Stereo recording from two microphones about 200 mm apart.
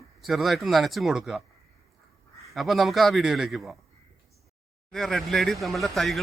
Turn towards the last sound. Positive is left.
turn(degrees=0)  # may be behind; listen again after turning